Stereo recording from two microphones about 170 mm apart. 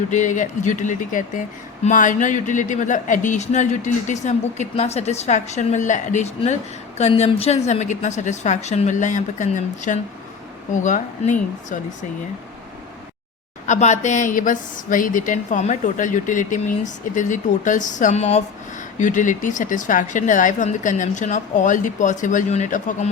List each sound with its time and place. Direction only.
0.1 s speech: 45° left (ahead or behind)
13.7 s speech: 45° left (ahead or behind)